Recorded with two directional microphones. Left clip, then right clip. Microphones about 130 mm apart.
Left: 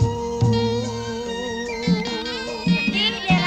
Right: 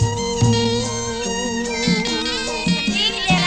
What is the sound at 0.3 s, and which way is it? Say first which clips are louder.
Music: right 3 dB; 50° right (ahead or behind).